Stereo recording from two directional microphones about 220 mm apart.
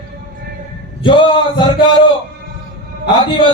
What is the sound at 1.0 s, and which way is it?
Speech, 20° left (ahead or behind).